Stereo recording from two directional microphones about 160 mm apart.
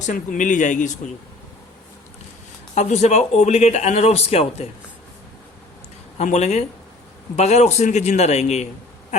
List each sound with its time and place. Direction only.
0.0 s a man's voice: 50° left (ahead or behind)
2.7 s a man's voice: 45° left (ahead or behind)
6.1 s a man's voice: 45° left (ahead or behind)